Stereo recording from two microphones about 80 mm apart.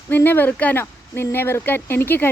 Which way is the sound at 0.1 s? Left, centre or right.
Left.